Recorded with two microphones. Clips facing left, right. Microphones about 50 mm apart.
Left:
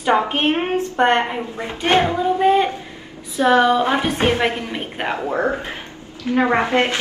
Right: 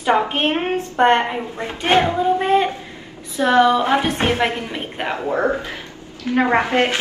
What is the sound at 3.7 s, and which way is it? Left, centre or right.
A woman's voice, centre.